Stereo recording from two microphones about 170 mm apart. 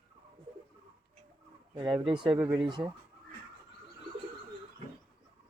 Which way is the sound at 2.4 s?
25° right (ahead or behind).